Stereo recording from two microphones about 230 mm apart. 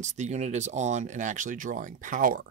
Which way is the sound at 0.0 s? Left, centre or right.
Right.